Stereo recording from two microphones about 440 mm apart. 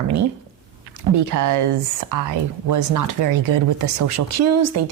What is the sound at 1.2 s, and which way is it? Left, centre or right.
A woman's voice, right.